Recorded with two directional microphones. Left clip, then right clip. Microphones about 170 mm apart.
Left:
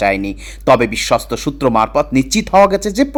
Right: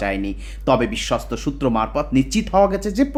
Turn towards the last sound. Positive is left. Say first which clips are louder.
# left 6 dB
turn(degrees=35)  # may be behind; listen again after turning